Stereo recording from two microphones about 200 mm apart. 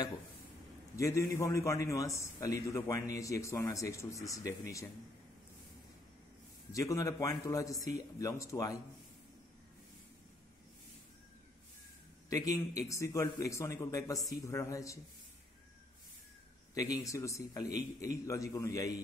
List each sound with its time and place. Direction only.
0.9 s a man's voice: 15° left (ahead or behind)
6.7 s a man's voice: 15° left (ahead or behind)
12.3 s a man's voice: 15° left (ahead or behind)
16.7 s a man's voice: 15° left (ahead or behind)